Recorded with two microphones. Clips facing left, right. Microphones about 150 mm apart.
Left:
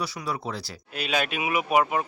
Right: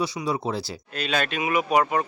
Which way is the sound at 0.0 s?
25° right (ahead or behind).